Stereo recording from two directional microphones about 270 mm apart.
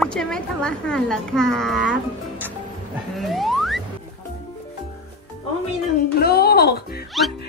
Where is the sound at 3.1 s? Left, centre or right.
Centre.